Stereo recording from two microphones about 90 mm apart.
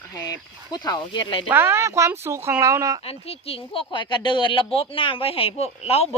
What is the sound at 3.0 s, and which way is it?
Speech, 90° left.